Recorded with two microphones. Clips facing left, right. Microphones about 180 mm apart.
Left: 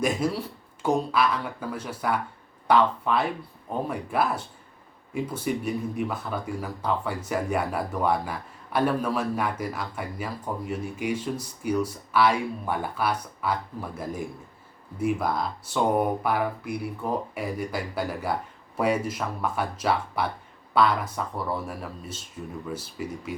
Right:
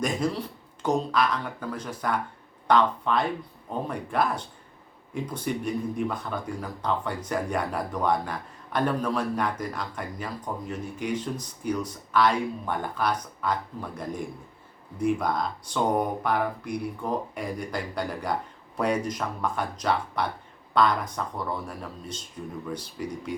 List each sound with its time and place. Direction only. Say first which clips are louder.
0.0 s speech: left 1 dB; 10° left (ahead or behind)